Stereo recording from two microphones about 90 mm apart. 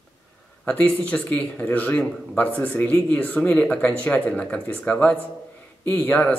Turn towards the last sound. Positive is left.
turn(degrees=15)  # may be behind; listen again after turning